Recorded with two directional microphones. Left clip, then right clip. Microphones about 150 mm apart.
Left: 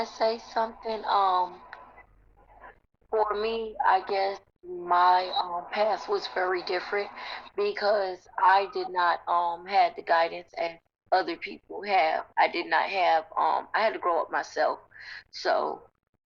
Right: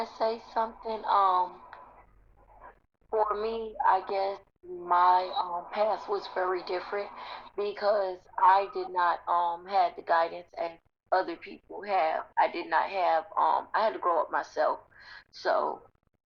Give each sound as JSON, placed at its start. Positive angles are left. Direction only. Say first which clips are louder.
{"t": 0.0, "sound": "a woman's voice", "louder": "left 3 dB", "side_deg": 20}